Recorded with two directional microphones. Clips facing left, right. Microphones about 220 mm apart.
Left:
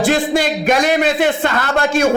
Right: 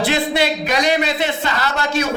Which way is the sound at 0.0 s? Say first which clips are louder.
Left 3 dB; 50° left (ahead or behind).